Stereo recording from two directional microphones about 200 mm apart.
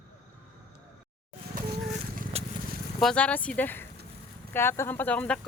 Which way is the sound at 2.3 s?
30° right (ahead or behind).